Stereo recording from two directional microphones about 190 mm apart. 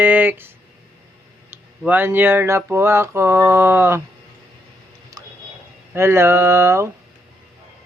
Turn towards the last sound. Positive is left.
turn(degrees=-15)  # may be behind; listen again after turning